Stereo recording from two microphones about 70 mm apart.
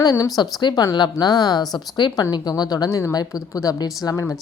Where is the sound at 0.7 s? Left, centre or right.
Left.